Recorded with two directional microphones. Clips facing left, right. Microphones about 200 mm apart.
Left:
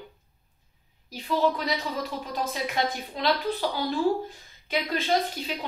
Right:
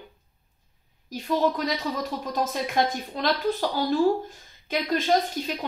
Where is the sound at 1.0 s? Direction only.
45° right (ahead or behind).